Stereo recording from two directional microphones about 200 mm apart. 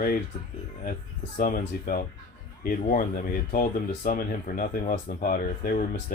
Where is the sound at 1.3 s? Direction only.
40° left (ahead or behind).